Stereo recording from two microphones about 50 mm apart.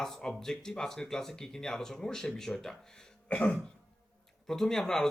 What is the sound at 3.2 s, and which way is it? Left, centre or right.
Cough, left.